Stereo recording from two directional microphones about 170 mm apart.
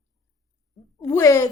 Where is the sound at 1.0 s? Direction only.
20° left (ahead or behind).